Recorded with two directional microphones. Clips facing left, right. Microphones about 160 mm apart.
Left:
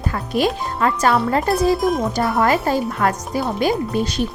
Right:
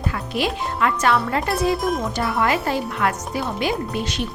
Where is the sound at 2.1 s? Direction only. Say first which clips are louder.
Left 4 dB; 40° left (ahead or behind).